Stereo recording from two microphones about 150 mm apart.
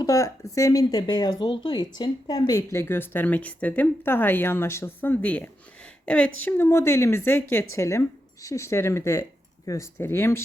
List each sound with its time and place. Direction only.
0.0 s speech: 20° left (ahead or behind)